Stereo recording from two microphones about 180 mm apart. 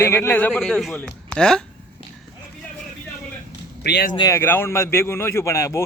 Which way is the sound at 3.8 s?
65° left (ahead or behind).